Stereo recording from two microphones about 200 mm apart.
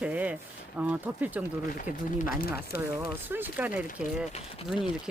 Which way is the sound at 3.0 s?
10° right (ahead or behind).